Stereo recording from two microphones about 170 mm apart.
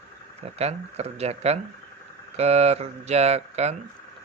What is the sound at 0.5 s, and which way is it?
Speech, 40° right (ahead or behind).